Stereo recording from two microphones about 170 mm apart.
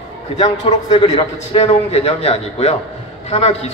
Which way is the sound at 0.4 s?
30° left (ahead or behind).